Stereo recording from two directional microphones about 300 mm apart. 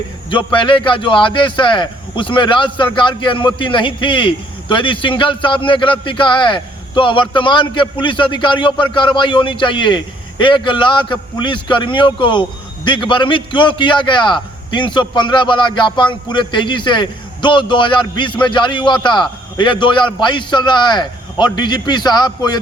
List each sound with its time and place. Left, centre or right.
0.3 s a man's voice: centre